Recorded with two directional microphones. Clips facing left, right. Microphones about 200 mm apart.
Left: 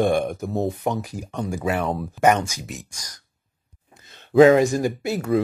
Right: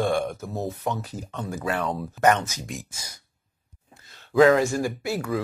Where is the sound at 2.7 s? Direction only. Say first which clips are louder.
Even; 5° right (ahead or behind).